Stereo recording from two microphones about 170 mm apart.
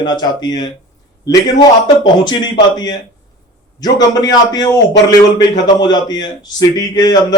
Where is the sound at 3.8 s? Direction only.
25° left (ahead or behind).